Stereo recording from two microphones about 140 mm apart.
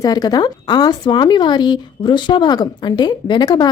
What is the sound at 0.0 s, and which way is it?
Speech, 25° left (ahead or behind).